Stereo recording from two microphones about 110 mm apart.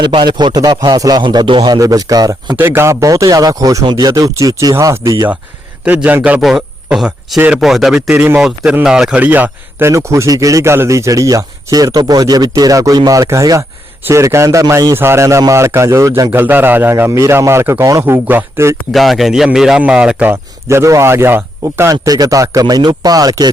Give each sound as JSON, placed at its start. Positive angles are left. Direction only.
{"t": 0.0, "sound": "speech", "side_deg": -45}
{"t": 2.6, "sound": "speech", "side_deg": -20}
{"t": 5.8, "sound": "speech", "side_deg": -10}
{"t": 16.3, "sound": "speech", "side_deg": -20}
{"t": 18.0, "sound": "speech", "side_deg": -20}
{"t": 18.9, "sound": "speech", "side_deg": 0}
{"t": 20.3, "sound": "speech", "side_deg": -25}
{"t": 22.0, "sound": "speech", "side_deg": -35}